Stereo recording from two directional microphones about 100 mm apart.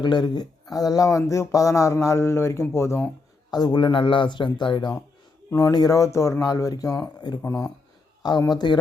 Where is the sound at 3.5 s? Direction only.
45° left (ahead or behind).